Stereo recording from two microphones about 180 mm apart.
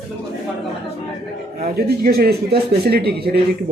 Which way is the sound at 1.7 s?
60° right (ahead or behind).